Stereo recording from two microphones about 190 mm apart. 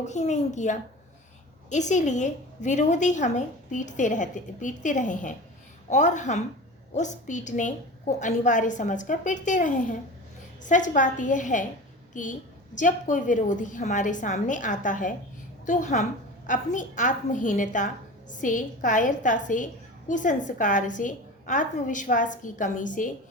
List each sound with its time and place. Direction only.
0.0 s a woman's voice: 40° left (ahead or behind)